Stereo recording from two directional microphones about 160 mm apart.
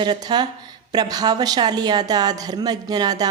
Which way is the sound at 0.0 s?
25° right (ahead or behind).